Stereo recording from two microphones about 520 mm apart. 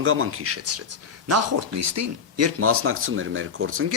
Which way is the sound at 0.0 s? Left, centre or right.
Right.